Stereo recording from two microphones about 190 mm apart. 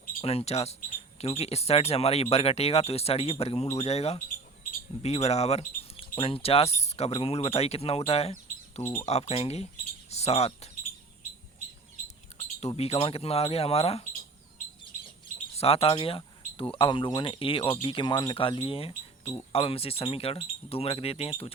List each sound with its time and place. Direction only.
0.2 s speech: 30° left (ahead or behind)
8.8 s speech: 10° left (ahead or behind)
9.0 s speech: 35° left (ahead or behind)
12.5 s speech: 35° left (ahead or behind)
15.5 s speech: 30° left (ahead or behind)